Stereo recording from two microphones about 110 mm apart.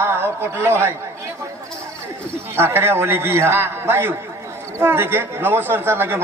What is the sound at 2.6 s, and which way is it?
A man's voice, 20° right (ahead or behind).